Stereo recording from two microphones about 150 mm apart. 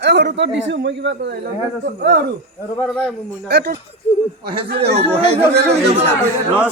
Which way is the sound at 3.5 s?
90° right.